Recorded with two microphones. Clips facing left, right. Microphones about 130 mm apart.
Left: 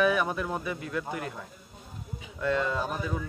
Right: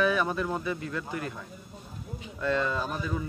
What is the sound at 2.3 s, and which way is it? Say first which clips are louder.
Speech: even; 15° left (ahead or behind).